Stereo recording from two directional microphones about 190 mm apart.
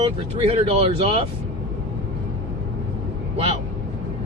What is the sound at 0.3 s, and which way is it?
Speech, 30° right (ahead or behind).